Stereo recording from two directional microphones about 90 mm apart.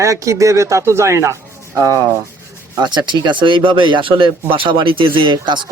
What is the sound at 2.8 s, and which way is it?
Speech, 55° right (ahead or behind).